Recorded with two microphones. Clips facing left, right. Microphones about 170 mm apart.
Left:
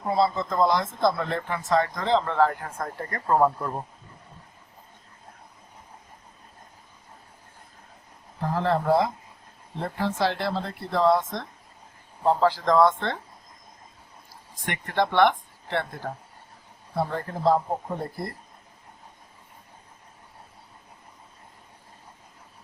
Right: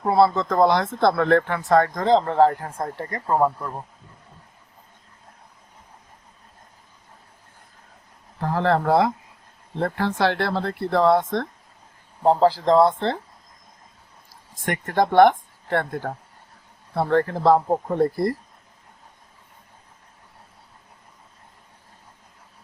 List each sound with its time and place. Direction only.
0.1 s speech: 70° right (ahead or behind); by 3.3 s 20° right (ahead or behind)
8.5 s speech: 65° right (ahead or behind)
12.2 s speech: 35° right (ahead or behind)
14.6 s speech: 45° right (ahead or behind)
16.9 s speech: 65° right (ahead or behind)